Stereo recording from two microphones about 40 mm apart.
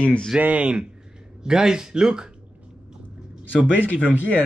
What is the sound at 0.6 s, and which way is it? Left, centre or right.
Speech, right.